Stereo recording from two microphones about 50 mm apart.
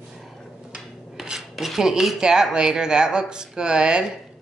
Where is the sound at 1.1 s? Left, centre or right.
Centre.